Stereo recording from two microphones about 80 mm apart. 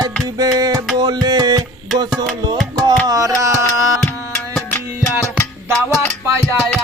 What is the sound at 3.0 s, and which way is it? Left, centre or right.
Music, right.